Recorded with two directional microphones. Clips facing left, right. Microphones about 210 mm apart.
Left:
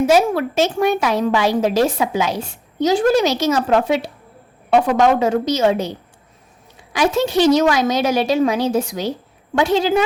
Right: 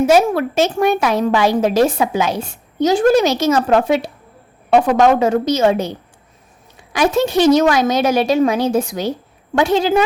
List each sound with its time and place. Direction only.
0.1 s a woman's voice: 50° right (ahead or behind)
6.9 s a woman's voice: 50° right (ahead or behind)